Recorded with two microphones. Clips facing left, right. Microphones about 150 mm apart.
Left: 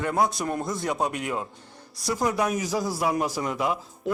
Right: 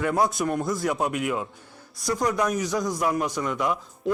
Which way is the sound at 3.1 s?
25° left (ahead or behind).